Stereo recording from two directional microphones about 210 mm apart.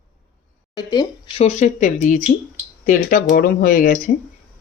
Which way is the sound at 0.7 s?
20° left (ahead or behind).